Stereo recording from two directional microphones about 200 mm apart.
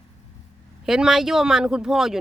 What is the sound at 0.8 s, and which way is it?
Speech, 5° right (ahead or behind).